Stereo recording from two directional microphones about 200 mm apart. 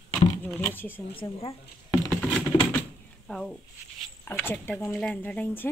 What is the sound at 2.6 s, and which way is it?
Door, 5° left (ahead or behind).